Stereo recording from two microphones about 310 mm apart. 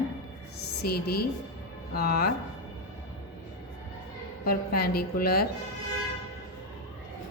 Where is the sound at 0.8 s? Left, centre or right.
Left.